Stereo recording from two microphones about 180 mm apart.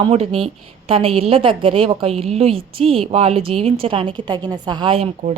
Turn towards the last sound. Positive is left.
turn(degrees=-35)  # may be behind; listen again after turning